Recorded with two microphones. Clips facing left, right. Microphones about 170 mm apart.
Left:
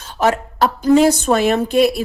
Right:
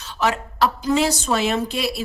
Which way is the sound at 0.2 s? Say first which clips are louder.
Left 4 dB; 50° left (ahead or behind).